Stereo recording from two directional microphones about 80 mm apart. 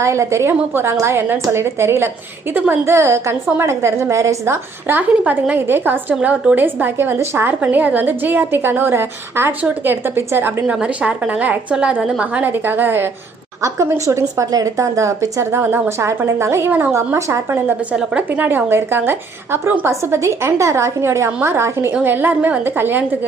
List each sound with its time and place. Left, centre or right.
0.0 s a woman's voice: right
10.7 s a woman's voice: centre; by 17.6 s right
18.3 s a woman's voice: right